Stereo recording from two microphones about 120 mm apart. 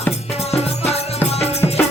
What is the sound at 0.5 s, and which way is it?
Music, 60° left (ahead or behind).